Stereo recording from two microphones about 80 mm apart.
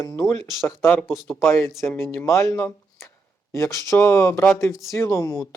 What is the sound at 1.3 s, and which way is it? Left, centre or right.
Speech, left.